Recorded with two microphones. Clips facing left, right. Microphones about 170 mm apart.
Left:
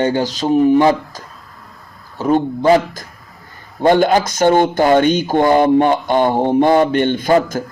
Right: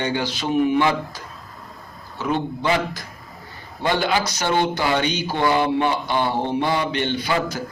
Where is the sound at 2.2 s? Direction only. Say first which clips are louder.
Left 9 dB; 45° left (ahead or behind).